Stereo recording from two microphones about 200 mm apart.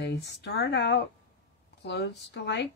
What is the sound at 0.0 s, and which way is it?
Speech, 55° left (ahead or behind).